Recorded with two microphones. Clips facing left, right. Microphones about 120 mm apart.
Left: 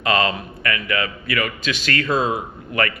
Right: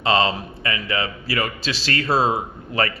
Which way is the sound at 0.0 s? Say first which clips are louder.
Right 1 dB; 30° right (ahead or behind).